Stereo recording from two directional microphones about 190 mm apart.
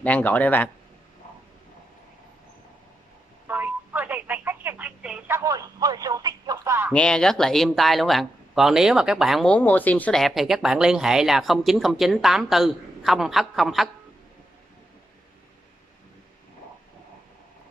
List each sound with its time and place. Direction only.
0.0 s speech: 10° left (ahead or behind)
3.4 s telephone: 10° right (ahead or behind)
5.4 s a sound: 20° right (ahead or behind)
6.9 s speech: 5° left (ahead or behind)